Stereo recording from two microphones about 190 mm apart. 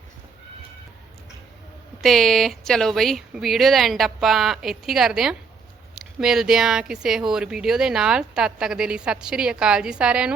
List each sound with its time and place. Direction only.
2.0 s speech: centre (ahead or behind)